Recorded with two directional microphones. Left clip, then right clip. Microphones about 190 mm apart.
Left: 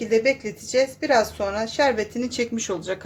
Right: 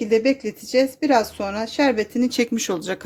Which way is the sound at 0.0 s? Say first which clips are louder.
Right 1 dB; 45° right (ahead or behind).